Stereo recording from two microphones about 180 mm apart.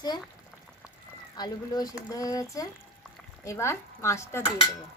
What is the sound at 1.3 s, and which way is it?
Speech, 20° left (ahead or behind).